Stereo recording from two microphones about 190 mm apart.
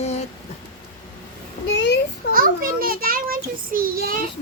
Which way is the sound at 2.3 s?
50° right (ahead or behind).